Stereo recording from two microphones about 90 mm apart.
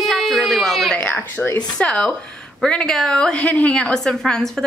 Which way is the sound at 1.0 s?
20° left (ahead or behind).